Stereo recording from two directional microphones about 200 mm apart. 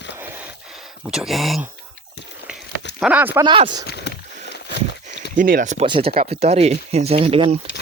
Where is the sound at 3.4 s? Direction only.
25° right (ahead or behind).